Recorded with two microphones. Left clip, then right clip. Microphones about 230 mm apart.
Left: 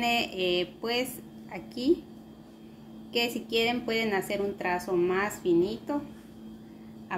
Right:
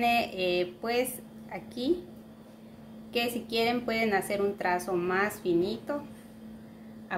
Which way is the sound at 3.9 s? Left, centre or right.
Centre.